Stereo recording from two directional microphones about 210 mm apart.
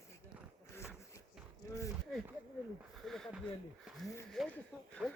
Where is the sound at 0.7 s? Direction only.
10° left (ahead or behind).